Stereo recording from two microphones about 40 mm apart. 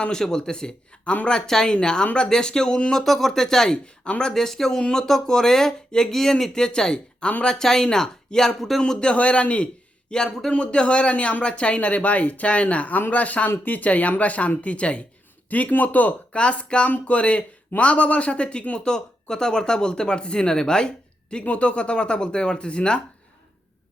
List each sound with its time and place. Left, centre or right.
0.1 s speech: centre
1.7 s speech: left
2.9 s speech: centre
6.5 s speech: centre
7.4 s speech: centre
9.1 s speech: left
10.1 s speech: centre
10.5 s a man's voice: left
15.4 s a man's voice: left
16.3 s speech: left
18.9 s speech: centre